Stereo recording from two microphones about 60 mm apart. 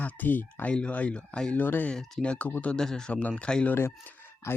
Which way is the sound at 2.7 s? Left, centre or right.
Centre.